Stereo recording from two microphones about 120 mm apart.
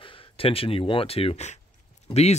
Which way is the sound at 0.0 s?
50° left (ahead or behind).